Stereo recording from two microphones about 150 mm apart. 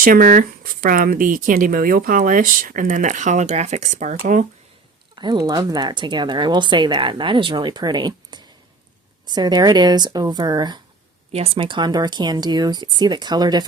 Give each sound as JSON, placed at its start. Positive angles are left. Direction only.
{"t": 0.0, "sound": "speech", "side_deg": -70}
{"t": 5.1, "sound": "speech", "side_deg": -30}
{"t": 11.3, "sound": "speech", "side_deg": -45}